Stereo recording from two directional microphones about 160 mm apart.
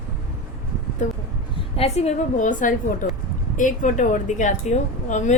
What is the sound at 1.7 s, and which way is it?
Speech, 40° left (ahead or behind).